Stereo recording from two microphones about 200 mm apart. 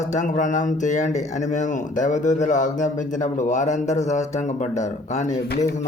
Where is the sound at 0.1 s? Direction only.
40° left (ahead or behind).